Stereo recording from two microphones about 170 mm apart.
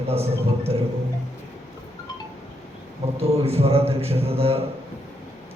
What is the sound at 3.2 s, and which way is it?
A man's voice, 35° right (ahead or behind).